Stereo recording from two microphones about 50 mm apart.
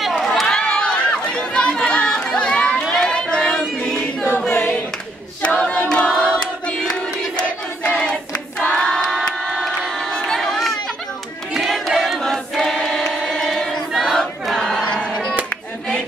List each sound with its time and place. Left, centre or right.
0.1 s crowd: centre
0.7 s run: centre
1.3 s chatter: centre
2.9 s crowd: centre
3.8 s choir: centre
5.4 s choir: left
6.0 s crowd: centre
11.5 s a sound: centre
12.0 s choir: centre